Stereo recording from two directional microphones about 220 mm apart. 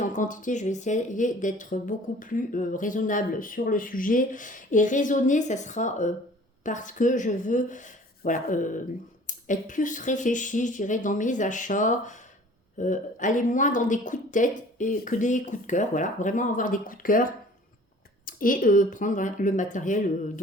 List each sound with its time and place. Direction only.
0.0 s speech: 35° left (ahead or behind)
18.3 s speech: 40° left (ahead or behind)